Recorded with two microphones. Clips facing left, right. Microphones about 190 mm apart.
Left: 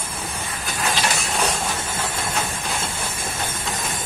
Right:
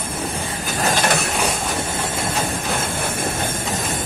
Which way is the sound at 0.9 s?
55° right (ahead or behind).